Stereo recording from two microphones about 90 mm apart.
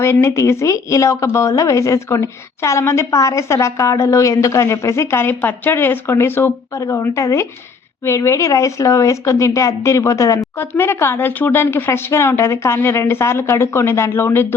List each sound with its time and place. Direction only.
0.0 s speech: 30° left (ahead or behind)
6.7 s speech: 35° left (ahead or behind)